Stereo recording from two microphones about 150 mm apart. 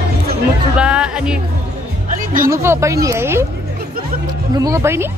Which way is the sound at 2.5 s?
20° right (ahead or behind).